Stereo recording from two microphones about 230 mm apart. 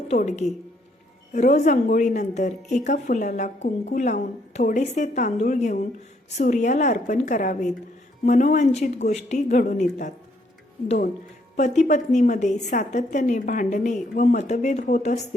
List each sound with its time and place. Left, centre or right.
0.1 s a woman's voice: left